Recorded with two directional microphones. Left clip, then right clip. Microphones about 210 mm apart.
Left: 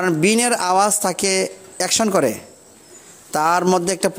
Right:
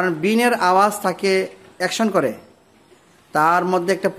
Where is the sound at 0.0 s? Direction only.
40° left (ahead or behind).